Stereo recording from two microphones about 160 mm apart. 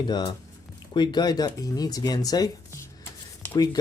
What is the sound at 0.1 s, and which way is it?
Speech, 25° left (ahead or behind).